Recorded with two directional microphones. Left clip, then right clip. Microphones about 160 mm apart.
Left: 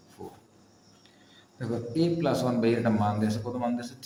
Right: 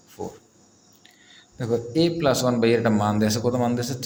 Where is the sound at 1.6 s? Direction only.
50° right (ahead or behind).